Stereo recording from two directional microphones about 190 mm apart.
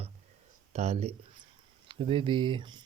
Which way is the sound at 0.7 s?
35° right (ahead or behind).